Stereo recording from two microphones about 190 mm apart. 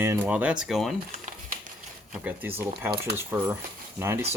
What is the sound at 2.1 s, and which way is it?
Speech, 10° right (ahead or behind).